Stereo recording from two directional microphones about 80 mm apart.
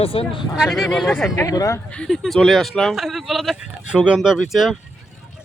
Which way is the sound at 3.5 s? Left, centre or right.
Centre.